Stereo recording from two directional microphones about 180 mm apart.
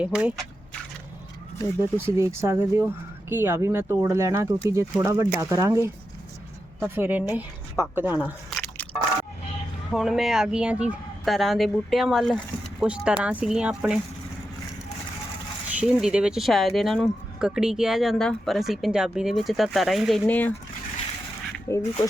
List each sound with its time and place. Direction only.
0.0 s speech: 5° right (ahead or behind)
1.8 s speech: 15° right (ahead or behind)
8.4 s biting: 5° left (ahead or behind)
9.9 s speech: centre (ahead or behind)
15.7 s speech: 5° right (ahead or behind); by 20.5 s 10° left (ahead or behind)
21.7 s speech: 15° left (ahead or behind)